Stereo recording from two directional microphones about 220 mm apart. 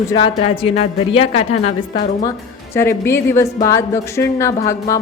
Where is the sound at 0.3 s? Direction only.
25° left (ahead or behind).